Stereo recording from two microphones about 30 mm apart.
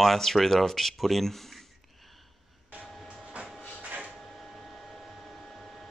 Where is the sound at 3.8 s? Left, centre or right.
Right.